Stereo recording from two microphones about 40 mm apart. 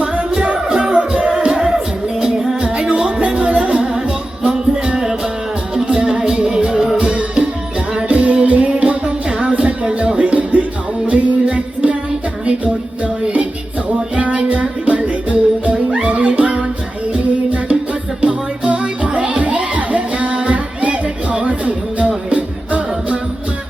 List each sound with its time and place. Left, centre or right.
0.0 s music: right
0.3 s music: right
0.9 s music: right
1.5 s music: centre
4.9 s music: centre; by 11.9 s right
13.0 s music: right